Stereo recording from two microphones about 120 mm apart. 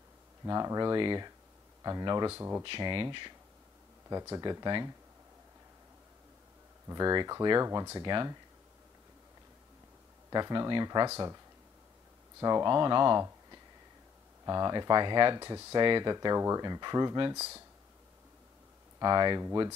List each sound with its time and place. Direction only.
0.5 s speech: 30° right (ahead or behind)
2.3 s speech: 20° right (ahead or behind)
2.6 s speech: 45° right (ahead or behind)
4.1 s speech: 30° right (ahead or behind)
6.9 s speech: 30° right (ahead or behind)
10.3 s speech: 35° right (ahead or behind)
12.4 s speech: 30° right (ahead or behind)
14.4 s speech: 35° right (ahead or behind)
17.4 s speech: 20° right (ahead or behind)
18.9 s speech: 35° right (ahead or behind)